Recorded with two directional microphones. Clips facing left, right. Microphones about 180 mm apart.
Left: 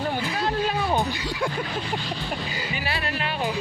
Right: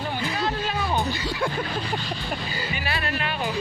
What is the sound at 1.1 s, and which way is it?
Speech, 15° left (ahead or behind).